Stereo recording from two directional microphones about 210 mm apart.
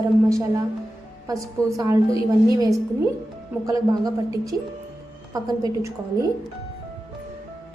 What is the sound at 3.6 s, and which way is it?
A woman's voice, 15° right (ahead or behind).